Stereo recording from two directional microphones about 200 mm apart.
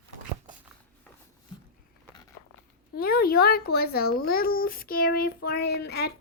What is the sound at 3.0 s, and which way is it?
Child singing, 50° left (ahead or behind).